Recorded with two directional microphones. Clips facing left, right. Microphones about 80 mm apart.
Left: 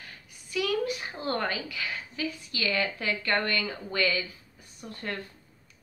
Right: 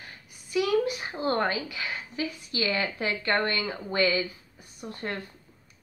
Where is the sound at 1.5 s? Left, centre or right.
Centre.